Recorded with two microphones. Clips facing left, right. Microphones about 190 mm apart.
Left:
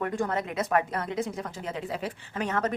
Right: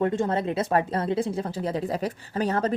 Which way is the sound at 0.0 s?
25° right (ahead or behind).